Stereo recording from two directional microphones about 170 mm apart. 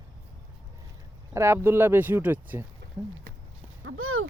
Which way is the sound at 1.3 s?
15° right (ahead or behind).